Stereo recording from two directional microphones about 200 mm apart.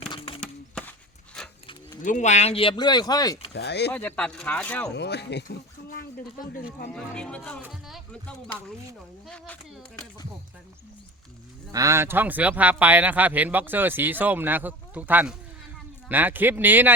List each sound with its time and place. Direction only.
0.1 s a sound: 25° left (ahead or behind)
0.3 s a sound: 5° left (ahead or behind)
1.4 s cattle: 5° left (ahead or behind)
2.0 s speech: 35° left (ahead or behind); by 3.4 s 20° left (ahead or behind)
3.5 s speech: 55° left (ahead or behind)
3.9 s speech: 10° left (ahead or behind)
4.9 s speech: 55° left (ahead or behind)
6.9 s speech: 5° left (ahead or behind)
11.7 s speech: 15° right (ahead or behind)